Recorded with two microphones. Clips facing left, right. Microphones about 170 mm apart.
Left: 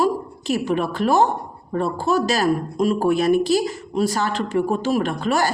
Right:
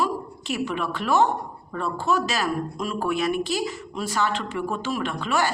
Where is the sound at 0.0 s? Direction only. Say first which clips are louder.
Left 6 dB; 40° left (ahead or behind).